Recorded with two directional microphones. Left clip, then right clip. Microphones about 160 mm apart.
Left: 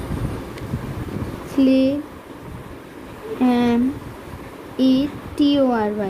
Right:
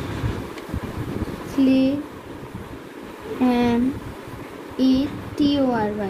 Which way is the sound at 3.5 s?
55° left (ahead or behind).